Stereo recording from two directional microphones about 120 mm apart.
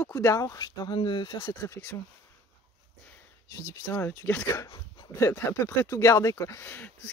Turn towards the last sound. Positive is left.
turn(degrees=15)  # may be behind; listen again after turning